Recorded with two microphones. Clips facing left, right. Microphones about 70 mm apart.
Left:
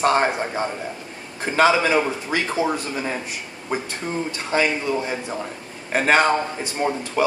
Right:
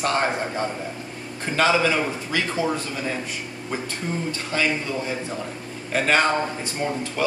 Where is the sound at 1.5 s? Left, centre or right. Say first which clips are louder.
Left 3 dB; left.